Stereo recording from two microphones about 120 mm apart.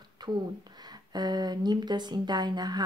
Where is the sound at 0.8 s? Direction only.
35° right (ahead or behind).